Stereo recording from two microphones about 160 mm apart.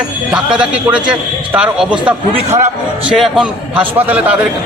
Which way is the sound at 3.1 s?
5° right (ahead or behind).